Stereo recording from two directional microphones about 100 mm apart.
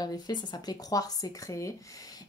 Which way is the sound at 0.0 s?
45° left (ahead or behind).